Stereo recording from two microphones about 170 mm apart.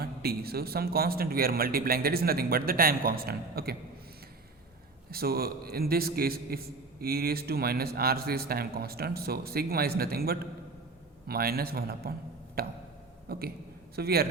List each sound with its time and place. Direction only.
0.0 s a man's voice: 65° right (ahead or behind)
5.1 s a man's voice: 65° right (ahead or behind)